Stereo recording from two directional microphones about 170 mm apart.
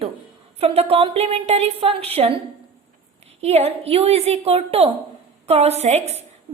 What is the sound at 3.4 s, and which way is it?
A woman's voice, 40° right (ahead or behind).